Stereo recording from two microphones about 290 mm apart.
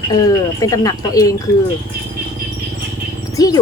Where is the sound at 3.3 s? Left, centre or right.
Centre.